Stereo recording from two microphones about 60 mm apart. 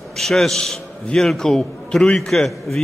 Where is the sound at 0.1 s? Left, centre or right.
Centre.